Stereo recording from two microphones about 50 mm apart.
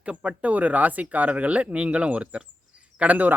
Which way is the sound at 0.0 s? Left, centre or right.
Right.